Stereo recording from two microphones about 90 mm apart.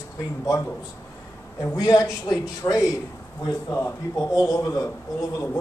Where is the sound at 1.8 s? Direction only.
40° left (ahead or behind).